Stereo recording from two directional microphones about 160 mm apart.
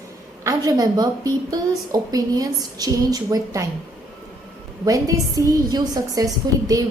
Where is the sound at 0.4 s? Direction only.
25° right (ahead or behind).